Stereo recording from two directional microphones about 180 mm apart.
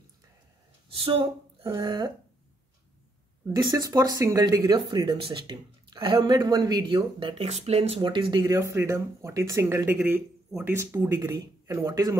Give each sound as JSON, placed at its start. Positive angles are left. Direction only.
{"t": 0.8, "sound": "speech", "side_deg": -30}
{"t": 3.5, "sound": "speech", "side_deg": -20}
{"t": 8.0, "sound": "speech", "side_deg": -25}